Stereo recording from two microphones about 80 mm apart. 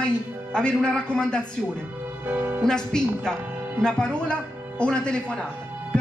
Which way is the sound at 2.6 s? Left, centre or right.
Centre.